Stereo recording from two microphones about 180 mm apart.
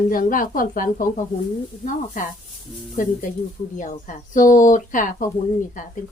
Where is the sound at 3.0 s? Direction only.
45° left (ahead or behind).